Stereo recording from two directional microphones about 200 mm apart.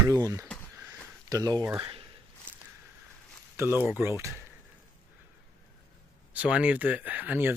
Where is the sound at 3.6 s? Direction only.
10° right (ahead or behind).